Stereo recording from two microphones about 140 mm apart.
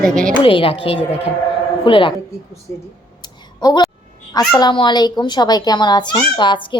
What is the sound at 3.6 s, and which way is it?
A woman's voice, 30° left (ahead or behind).